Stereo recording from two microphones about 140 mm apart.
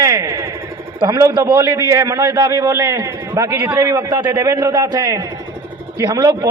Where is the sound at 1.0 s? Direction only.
20° right (ahead or behind).